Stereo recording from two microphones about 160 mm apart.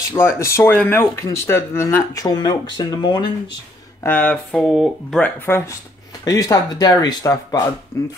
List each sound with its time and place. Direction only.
0.1 s speech: 15° left (ahead or behind)
4.0 s speech: 10° left (ahead or behind)
5.2 s speech: 15° left (ahead or behind)